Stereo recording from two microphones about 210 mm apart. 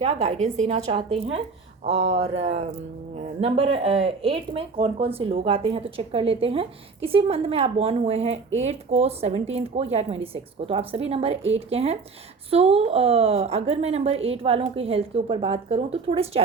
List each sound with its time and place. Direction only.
0.0 s a woman's voice: 30° right (ahead or behind)